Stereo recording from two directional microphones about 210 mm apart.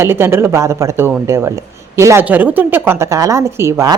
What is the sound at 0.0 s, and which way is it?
Speech, 10° right (ahead or behind).